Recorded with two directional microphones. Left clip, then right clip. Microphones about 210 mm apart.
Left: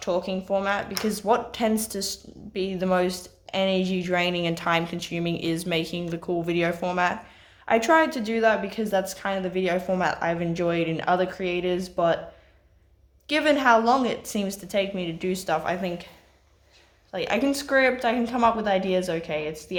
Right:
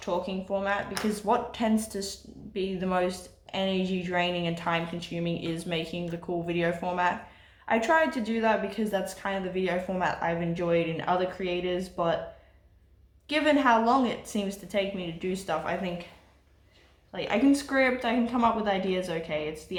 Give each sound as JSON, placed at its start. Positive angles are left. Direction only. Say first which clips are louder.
{"t": 0.0, "sound": "speech", "louder": "left 4 dB", "side_deg": 50}
{"t": 13.2, "sound": "speech", "louder": "left 3 dB", "side_deg": 50}
{"t": 17.1, "sound": "speech", "louder": "left 1 dB", "side_deg": 50}